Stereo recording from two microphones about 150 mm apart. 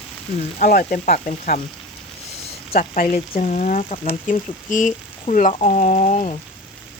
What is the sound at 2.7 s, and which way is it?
Speech, 65° left (ahead or behind).